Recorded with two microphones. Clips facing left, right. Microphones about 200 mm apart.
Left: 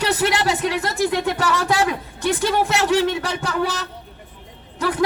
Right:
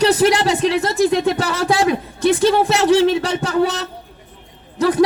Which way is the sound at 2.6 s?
35° right (ahead or behind).